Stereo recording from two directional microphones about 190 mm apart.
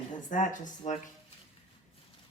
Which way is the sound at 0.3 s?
40° left (ahead or behind).